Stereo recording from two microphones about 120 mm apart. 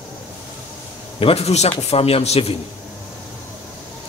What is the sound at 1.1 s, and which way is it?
A man's voice, 55° left (ahead or behind).